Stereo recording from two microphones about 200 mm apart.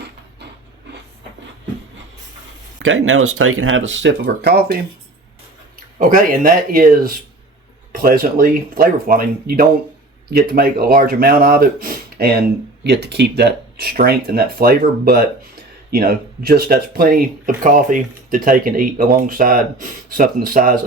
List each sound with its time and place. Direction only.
2.7 s speech: 75° right (ahead or behind); by 4.8 s 55° right (ahead or behind)
6.0 s speech: 45° right (ahead or behind)